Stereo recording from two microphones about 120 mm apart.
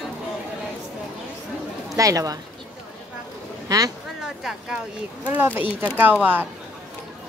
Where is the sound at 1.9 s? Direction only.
30° right (ahead or behind).